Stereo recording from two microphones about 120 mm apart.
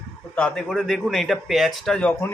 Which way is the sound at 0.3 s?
5° left (ahead or behind).